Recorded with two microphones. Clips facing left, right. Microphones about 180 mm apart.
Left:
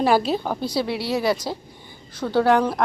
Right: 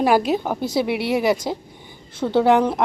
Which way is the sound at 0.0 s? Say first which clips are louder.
Right 2 dB; 15° right (ahead or behind).